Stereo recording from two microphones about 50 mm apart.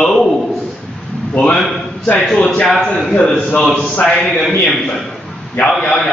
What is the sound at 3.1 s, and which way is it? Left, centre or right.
A man's voice, centre.